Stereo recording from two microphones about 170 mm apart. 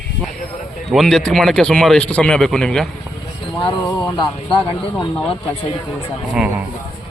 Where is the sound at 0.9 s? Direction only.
Centre (ahead or behind).